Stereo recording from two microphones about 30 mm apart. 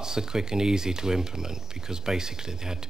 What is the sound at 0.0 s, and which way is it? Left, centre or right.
Speech, right.